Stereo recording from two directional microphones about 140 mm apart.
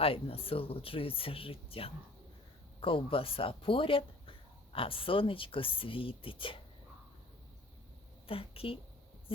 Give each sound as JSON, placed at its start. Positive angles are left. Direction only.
{"t": 0.0, "sound": "speech", "side_deg": 40}
{"t": 8.3, "sound": "speech", "side_deg": 40}